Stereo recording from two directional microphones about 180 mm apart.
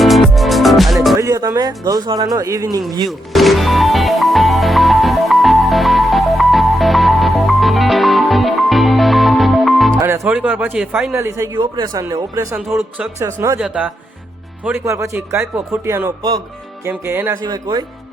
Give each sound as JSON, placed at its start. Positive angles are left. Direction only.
{"t": 0.0, "sound": "music", "side_deg": 0}
{"t": 1.1, "sound": "speech", "side_deg": -20}
{"t": 3.1, "sound": "music", "side_deg": 0}
{"t": 10.0, "sound": "speech", "side_deg": -10}
{"t": 11.1, "sound": "speech", "side_deg": -15}
{"t": 13.6, "sound": "speech", "side_deg": -5}